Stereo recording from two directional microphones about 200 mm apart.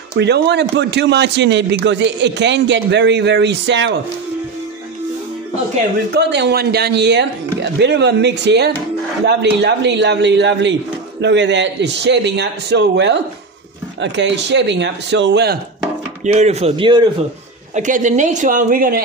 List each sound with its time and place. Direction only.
0.2 s a man's voice: 55° right (ahead or behind)
6.1 s a man's voice: 60° right (ahead or behind)
16.3 s speech: 35° right (ahead or behind)
17.7 s speech: 40° right (ahead or behind)